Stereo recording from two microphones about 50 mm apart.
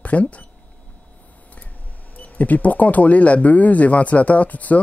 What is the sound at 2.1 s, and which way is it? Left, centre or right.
Speech, left.